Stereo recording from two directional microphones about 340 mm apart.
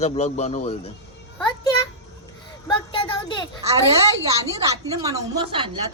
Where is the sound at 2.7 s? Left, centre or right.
Centre.